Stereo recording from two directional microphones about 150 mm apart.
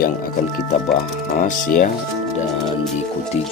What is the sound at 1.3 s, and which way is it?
Speech, 60° left (ahead or behind).